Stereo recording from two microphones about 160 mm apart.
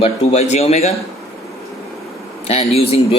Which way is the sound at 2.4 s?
40° left (ahead or behind).